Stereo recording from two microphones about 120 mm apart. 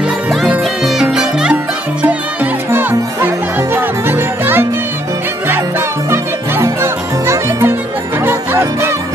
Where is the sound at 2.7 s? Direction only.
20° right (ahead or behind).